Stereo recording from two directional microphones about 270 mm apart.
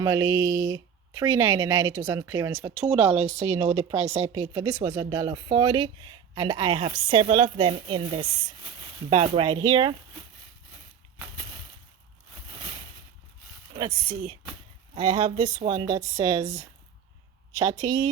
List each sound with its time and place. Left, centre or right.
0.0 s speech: centre
3.2 s speech: right
4.4 s speech: centre
13.7 s speech: centre